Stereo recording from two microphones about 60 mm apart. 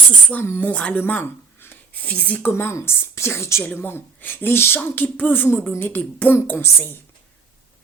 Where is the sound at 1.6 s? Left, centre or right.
Left.